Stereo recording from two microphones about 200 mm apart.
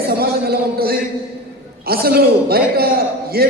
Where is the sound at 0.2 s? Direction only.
50° right (ahead or behind).